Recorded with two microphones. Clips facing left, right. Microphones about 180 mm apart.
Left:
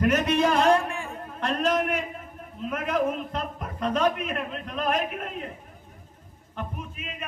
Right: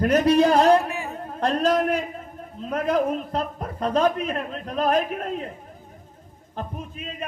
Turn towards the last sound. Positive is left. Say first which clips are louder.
# right 3 dB
turn(degrees=-35)  # may be behind; listen again after turning